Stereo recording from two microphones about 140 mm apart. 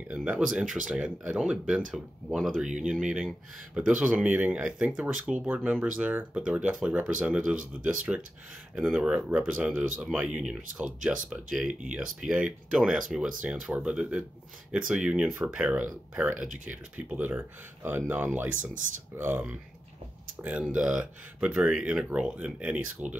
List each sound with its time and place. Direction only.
0.1 s speech: 10° right (ahead or behind)